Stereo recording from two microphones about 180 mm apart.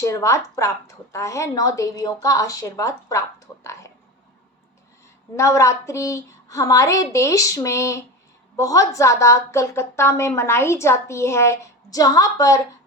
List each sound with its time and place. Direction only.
0.0 s a woman's voice: 15° left (ahead or behind)
5.4 s a woman's voice: 15° left (ahead or behind)